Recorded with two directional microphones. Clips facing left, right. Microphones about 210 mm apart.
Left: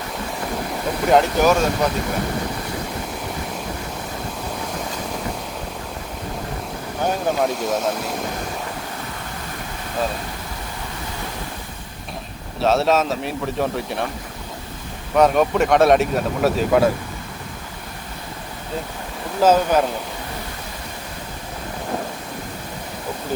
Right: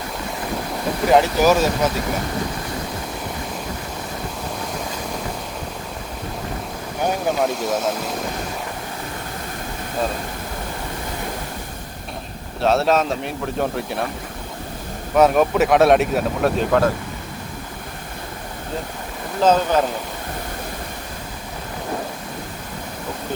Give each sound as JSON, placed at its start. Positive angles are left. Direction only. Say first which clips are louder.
{"t": 1.1, "sound": "speech", "louder": "right 1 dB", "side_deg": 0}
{"t": 7.3, "sound": "speech", "louder": "even", "side_deg": 0}
{"t": 12.5, "sound": "speech", "louder": "even", "side_deg": 0}
{"t": 15.1, "sound": "speech", "louder": "right 1 dB", "side_deg": 0}
{"t": 19.4, "sound": "speech", "louder": "left 1 dB", "side_deg": 10}